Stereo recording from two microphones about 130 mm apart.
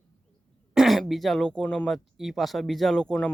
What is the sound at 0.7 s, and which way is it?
Speech, centre (ahead or behind).